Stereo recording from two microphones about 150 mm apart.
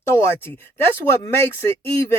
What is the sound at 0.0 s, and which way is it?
Speech, 15° left (ahead or behind).